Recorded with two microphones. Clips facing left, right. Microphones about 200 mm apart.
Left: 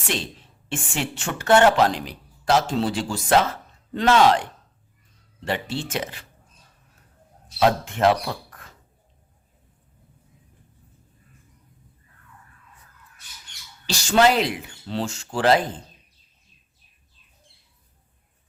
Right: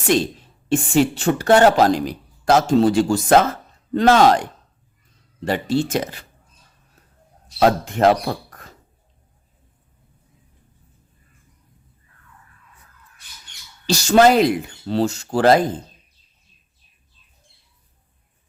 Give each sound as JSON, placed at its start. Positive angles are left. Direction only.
{"t": 0.1, "sound": "speech", "side_deg": -40}
{"t": 5.5, "sound": "speech", "side_deg": -40}
{"t": 7.6, "sound": "speech", "side_deg": -40}
{"t": 13.8, "sound": "speech", "side_deg": -40}